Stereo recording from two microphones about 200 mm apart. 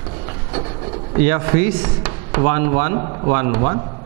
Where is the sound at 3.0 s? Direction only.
25° right (ahead or behind).